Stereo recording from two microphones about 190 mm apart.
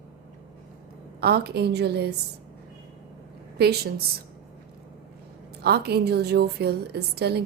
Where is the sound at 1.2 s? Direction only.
55° right (ahead or behind).